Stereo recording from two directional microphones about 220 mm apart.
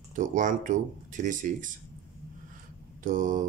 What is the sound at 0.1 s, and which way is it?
Speech, 35° right (ahead or behind).